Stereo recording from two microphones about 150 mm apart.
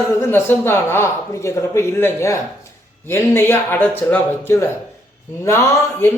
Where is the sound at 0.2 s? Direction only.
15° left (ahead or behind).